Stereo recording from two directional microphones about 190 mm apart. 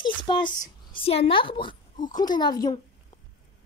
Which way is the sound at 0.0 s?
25° left (ahead or behind).